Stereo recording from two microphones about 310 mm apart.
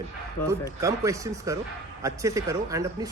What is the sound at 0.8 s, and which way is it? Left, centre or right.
Speech, centre.